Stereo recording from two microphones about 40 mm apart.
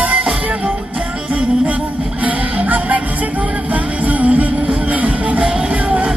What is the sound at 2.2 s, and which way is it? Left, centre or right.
Music, right.